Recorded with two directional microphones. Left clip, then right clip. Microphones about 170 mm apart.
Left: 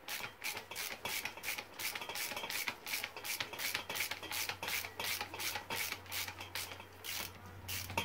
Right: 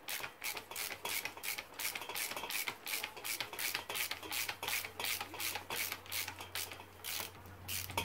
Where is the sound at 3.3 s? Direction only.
15° right (ahead or behind).